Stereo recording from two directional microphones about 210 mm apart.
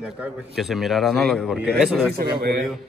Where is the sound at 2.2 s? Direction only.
50° right (ahead or behind).